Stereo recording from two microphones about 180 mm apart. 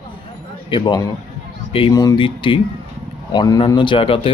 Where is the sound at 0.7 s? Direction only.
25° left (ahead or behind).